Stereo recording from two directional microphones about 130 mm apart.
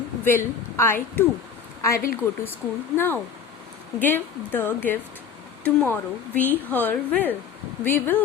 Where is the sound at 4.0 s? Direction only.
15° left (ahead or behind).